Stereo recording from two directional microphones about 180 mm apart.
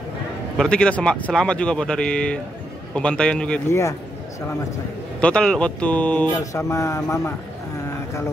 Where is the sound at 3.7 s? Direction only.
15° left (ahead or behind).